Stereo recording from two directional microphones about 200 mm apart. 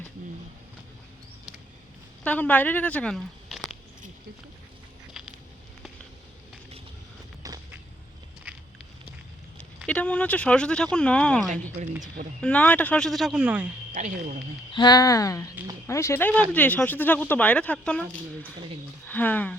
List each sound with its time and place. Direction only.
2.2 s speech: 5° left (ahead or behind)
5.2 s a sound: centre (ahead or behind)
7.4 s a sound: 15° right (ahead or behind)
9.8 s speech: 5° left (ahead or behind)
13.9 s a woman's voice: 40° right (ahead or behind)
14.7 s speech: 20° left (ahead or behind); by 18.0 s 5° left (ahead or behind)
19.0 s speech: 10° left (ahead or behind)